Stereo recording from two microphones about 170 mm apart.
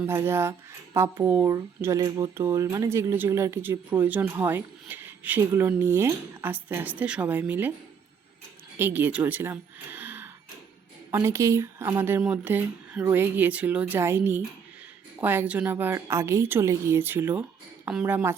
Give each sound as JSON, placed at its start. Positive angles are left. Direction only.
{"t": 0.0, "sound": "speech", "side_deg": -15}
{"t": 8.8, "sound": "a woman's voice", "side_deg": -10}